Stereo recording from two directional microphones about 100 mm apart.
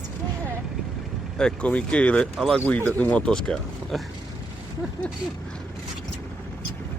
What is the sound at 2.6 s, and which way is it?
Speech, 20° left (ahead or behind).